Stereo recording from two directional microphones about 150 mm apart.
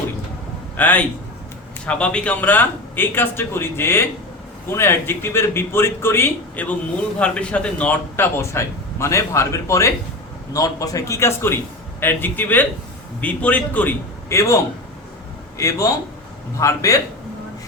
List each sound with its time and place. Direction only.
0.8 s a man's voice: 10° left (ahead or behind)